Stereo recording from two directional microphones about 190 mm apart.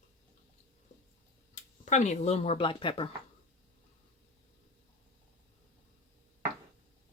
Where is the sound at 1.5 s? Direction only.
40° left (ahead or behind).